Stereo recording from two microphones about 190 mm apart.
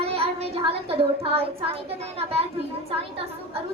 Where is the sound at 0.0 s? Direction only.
30° right (ahead or behind).